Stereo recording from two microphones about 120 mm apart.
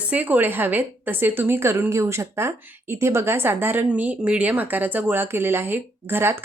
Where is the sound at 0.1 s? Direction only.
15° right (ahead or behind).